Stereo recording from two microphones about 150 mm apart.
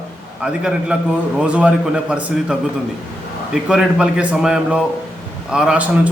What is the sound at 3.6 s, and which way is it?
A man's voice, 5° right (ahead or behind).